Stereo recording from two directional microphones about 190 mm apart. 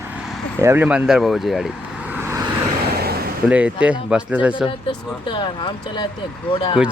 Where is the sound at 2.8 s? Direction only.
55° right (ahead or behind).